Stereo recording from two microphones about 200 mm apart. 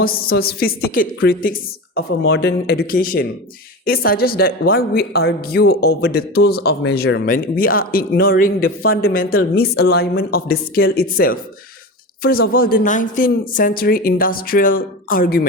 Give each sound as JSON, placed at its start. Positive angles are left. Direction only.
{"t": 0.0, "sound": "speech", "side_deg": 50}